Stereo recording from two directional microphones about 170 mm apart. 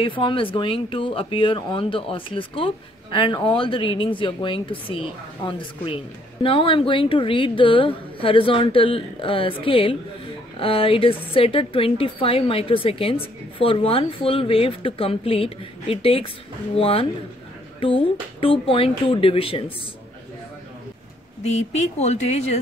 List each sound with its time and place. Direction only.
0.0 s speech: 30° left (ahead or behind)
21.4 s speech: 40° left (ahead or behind)